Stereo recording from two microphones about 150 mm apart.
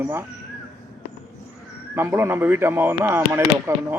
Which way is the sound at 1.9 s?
15° right (ahead or behind).